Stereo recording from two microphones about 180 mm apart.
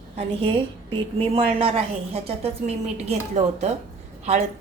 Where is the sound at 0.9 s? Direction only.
30° right (ahead or behind).